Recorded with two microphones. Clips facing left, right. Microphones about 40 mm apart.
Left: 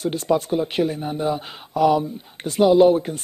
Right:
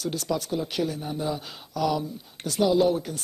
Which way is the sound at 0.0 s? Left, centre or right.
Left.